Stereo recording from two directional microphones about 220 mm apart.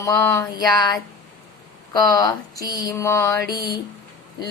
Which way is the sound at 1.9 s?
15° left (ahead or behind).